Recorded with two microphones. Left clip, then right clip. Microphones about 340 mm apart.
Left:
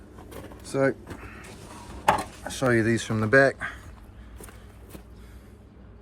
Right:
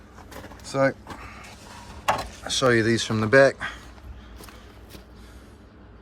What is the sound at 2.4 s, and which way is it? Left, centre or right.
Speech, centre.